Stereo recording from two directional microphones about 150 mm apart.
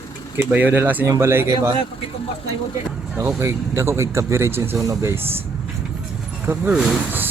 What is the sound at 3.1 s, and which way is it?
A man's voice, 15° right (ahead or behind).